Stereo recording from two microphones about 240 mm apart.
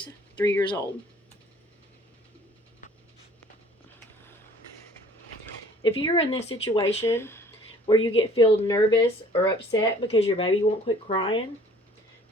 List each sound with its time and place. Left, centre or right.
0.3 s speech: centre
5.8 s speech: left
6.8 s a sound: centre
7.9 s speech: left